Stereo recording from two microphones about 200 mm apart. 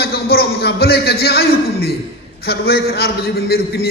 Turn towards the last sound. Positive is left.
turn(degrees=50)  # may be behind; listen again after turning